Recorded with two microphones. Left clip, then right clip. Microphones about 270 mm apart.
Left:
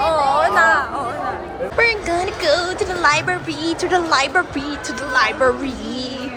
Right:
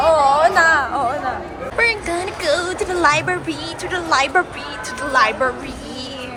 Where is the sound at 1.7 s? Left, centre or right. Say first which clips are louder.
Left 1 dB; centre.